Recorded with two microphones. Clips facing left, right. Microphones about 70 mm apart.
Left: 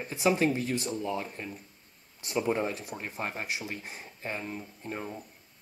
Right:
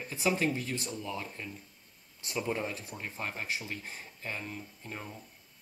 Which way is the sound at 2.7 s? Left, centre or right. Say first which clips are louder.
Left 3 dB; left.